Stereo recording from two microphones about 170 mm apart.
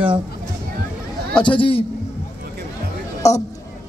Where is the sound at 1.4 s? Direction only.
30° left (ahead or behind).